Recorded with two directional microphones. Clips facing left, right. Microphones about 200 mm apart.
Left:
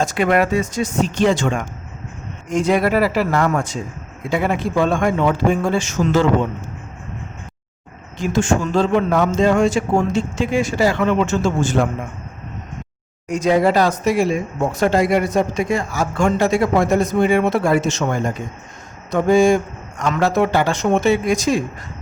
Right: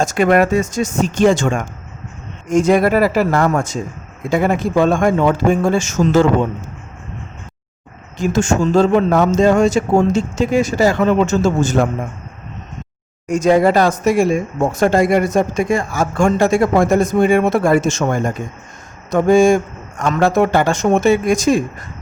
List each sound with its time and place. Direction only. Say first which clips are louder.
0.0 s speech: right 3 dB; 45° right (ahead or behind)
8.2 s a man's voice: right 3 dB; 45° right (ahead or behind)
13.2 s speech: right 3 dB; 50° right (ahead or behind)